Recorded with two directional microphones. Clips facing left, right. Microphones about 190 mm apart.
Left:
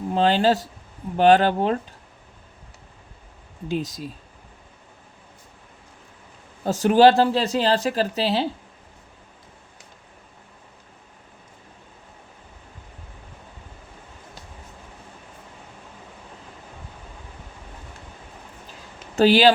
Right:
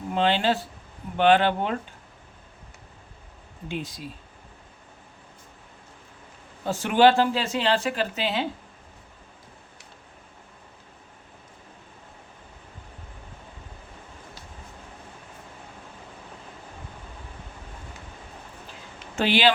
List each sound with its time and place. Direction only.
0.1 s speech: 40° left (ahead or behind)
3.7 s speech: 40° left (ahead or behind)
6.7 s speech: 40° left (ahead or behind)
19.1 s speech: 40° left (ahead or behind)